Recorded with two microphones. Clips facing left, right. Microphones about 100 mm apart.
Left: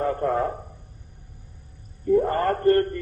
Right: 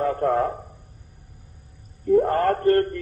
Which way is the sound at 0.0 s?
50° right (ahead or behind).